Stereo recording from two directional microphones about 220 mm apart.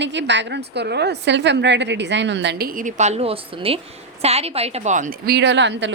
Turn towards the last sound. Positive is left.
turn(degrees=-55)  # may be behind; listen again after turning